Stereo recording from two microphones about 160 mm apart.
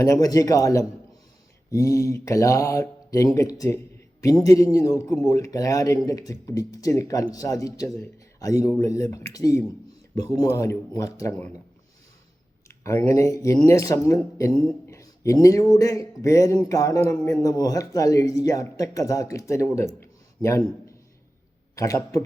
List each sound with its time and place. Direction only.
0.0 s speech: 20° left (ahead or behind)
12.6 s speech: 15° left (ahead or behind)
20.0 s a sound: 15° left (ahead or behind)
21.8 s speech: 20° left (ahead or behind)